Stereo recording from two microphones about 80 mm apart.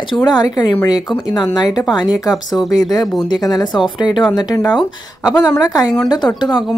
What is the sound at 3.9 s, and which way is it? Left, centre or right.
Speech, left.